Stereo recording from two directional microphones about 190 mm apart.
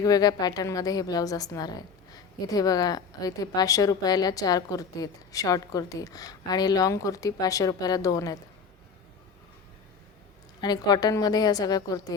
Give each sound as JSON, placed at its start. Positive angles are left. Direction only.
{"t": 0.0, "sound": "a woman's voice", "side_deg": 20}
{"t": 10.6, "sound": "a woman's voice", "side_deg": 20}